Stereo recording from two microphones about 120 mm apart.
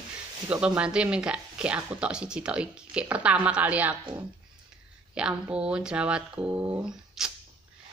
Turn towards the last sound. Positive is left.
turn(degrees=-5)  # may be behind; listen again after turning